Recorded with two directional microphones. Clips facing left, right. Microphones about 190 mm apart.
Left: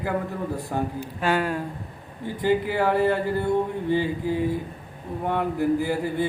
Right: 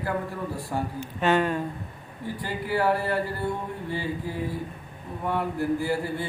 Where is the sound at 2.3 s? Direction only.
20° left (ahead or behind).